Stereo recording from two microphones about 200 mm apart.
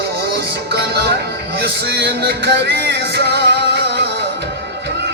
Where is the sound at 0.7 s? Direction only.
55° right (ahead or behind).